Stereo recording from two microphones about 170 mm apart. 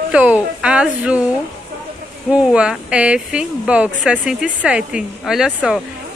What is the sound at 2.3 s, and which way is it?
Speech, 5° right (ahead or behind).